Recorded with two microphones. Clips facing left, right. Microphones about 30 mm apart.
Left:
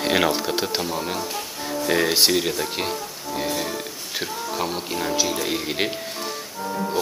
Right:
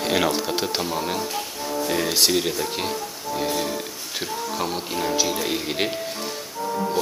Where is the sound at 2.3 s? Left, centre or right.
Centre.